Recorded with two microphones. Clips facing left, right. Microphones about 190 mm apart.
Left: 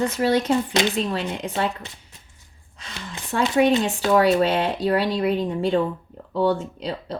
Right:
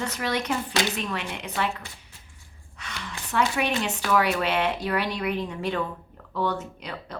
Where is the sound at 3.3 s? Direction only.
30° left (ahead or behind).